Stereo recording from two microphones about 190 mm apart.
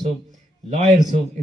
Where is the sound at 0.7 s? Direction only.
40° right (ahead or behind).